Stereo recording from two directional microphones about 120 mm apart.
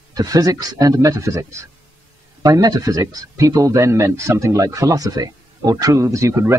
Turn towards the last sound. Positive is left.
turn(degrees=-25)  # may be behind; listen again after turning